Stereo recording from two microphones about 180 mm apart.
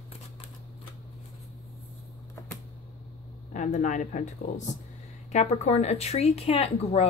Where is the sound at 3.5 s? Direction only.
45° left (ahead or behind).